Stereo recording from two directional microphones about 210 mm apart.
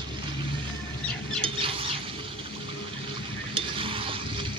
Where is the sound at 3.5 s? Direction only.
25° right (ahead or behind).